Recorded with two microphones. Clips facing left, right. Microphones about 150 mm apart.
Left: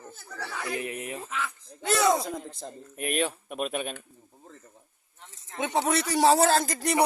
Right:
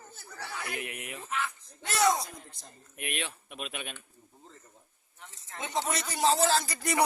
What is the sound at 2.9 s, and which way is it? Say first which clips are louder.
Speech: left 9 dB; 40° left (ahead or behind).